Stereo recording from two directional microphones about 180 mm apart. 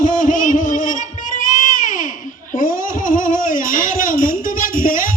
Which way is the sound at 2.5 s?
50° left (ahead or behind).